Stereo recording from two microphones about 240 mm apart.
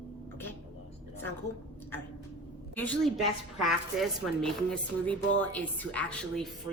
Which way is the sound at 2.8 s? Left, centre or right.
Centre.